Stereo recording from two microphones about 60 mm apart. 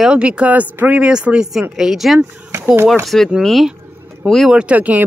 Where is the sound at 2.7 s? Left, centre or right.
Right.